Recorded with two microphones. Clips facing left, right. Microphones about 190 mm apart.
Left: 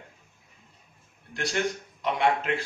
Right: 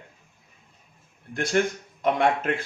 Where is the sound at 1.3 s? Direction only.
50° right (ahead or behind).